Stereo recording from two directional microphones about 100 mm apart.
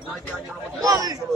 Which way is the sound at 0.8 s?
35° right (ahead or behind).